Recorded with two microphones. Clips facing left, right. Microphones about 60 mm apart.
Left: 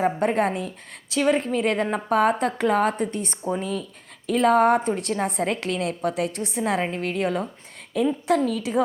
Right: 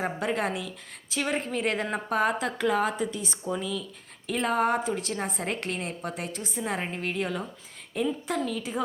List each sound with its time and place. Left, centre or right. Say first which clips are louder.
0.0 s a woman's voice: left 7 dB; left